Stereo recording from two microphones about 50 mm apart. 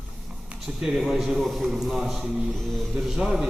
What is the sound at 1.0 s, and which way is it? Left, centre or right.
A man's voice, centre.